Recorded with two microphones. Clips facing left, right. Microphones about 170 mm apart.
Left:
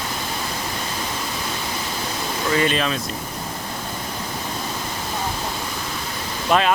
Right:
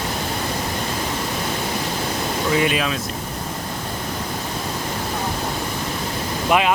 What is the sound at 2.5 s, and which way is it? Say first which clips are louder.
Speech: left 1 dB; 10° right (ahead or behind).